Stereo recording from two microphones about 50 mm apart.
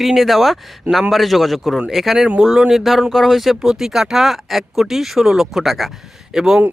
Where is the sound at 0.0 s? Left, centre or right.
Centre.